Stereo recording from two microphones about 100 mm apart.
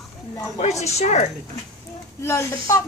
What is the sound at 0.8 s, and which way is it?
Speech, 90° left.